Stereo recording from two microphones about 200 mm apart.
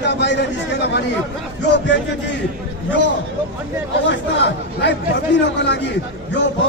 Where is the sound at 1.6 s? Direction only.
60° left (ahead or behind).